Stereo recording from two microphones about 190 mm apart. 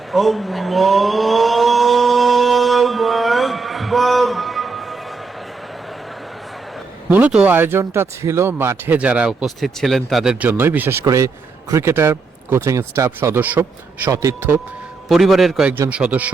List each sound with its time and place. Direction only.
0.1 s vehicle: centre (ahead or behind)
7.1 s speech: 5° right (ahead or behind)
15.1 s a man's voice: centre (ahead or behind)